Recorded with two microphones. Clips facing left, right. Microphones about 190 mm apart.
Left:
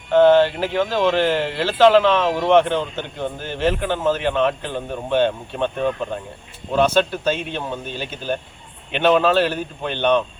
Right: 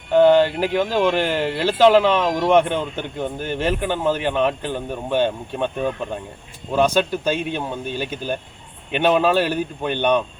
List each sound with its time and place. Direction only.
0.1 s speech: 15° right (ahead or behind)